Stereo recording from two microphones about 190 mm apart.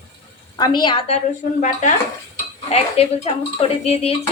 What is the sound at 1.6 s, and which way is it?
A woman's voice, 40° left (ahead or behind).